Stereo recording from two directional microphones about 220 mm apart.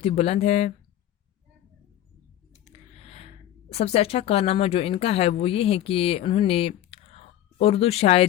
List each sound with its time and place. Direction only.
0.0 s speech: 30° left (ahead or behind)
2.5 s a sound: 30° left (ahead or behind)
3.7 s speech: 30° left (ahead or behind)